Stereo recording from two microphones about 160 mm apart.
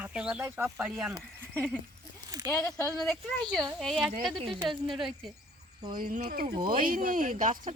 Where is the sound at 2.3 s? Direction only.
20° right (ahead or behind).